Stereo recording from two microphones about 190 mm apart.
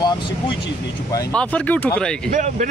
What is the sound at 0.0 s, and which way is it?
Speech, 20° left (ahead or behind).